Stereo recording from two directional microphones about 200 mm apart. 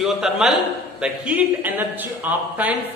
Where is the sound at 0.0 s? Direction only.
Centre (ahead or behind).